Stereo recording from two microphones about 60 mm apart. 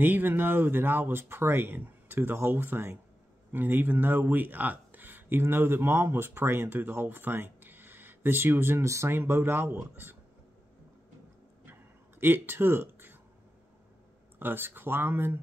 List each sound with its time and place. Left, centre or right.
0.0 s speech: right
8.8 s speech: right
9.1 s speech: right
12.2 s speech: right
14.4 s speech: right